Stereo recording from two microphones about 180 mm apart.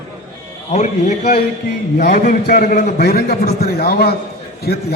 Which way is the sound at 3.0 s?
60° left (ahead or behind).